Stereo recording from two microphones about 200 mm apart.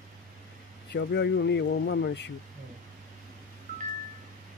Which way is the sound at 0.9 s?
60° left (ahead or behind).